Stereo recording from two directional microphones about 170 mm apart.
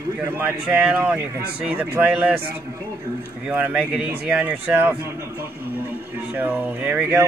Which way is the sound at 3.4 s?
10° right (ahead or behind).